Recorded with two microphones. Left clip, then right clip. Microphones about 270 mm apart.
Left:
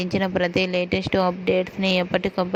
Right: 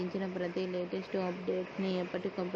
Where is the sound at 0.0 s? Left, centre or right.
Left.